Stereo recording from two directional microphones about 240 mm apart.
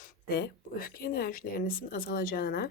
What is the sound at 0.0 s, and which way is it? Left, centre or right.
Speech, left.